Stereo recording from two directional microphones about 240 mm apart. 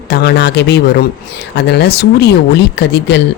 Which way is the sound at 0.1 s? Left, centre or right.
Left.